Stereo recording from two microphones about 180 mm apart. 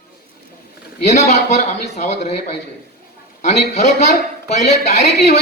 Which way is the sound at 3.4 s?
40° left (ahead or behind).